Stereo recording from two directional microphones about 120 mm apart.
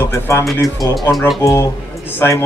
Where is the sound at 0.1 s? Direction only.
25° left (ahead or behind).